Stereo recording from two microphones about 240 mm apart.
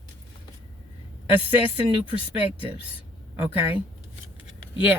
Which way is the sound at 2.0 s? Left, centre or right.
Left.